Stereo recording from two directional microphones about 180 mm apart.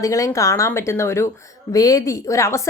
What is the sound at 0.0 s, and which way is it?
A woman's voice, 20° left (ahead or behind).